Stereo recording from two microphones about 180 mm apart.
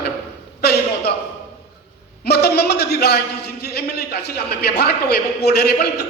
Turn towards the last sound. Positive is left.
turn(degrees=60)  # may be behind; listen again after turning